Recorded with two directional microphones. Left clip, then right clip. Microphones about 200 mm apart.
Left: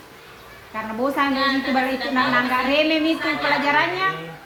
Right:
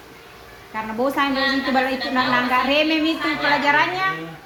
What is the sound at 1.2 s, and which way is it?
A woman's voice, 30° right (ahead or behind).